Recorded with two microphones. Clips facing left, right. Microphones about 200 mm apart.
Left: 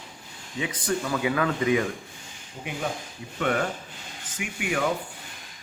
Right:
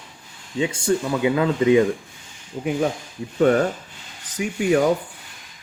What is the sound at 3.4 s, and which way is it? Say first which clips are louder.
Speech: right 9 dB; 35° right (ahead or behind).